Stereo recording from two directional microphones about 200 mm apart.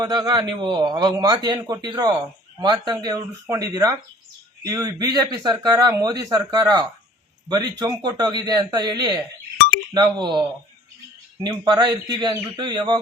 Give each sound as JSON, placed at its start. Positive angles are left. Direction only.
{"t": 0.0, "sound": "speech", "side_deg": -20}
{"t": 4.6, "sound": "speech", "side_deg": -20}
{"t": 9.6, "sound": "chink", "side_deg": 45}
{"t": 9.9, "sound": "speech", "side_deg": -20}